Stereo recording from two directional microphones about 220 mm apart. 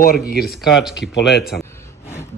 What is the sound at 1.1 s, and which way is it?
Speech, 50° left (ahead or behind).